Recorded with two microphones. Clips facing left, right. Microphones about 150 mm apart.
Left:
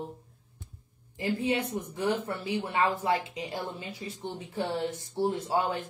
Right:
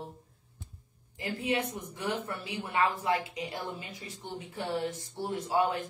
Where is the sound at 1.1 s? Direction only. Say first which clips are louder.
Left 3 dB; 25° left (ahead or behind).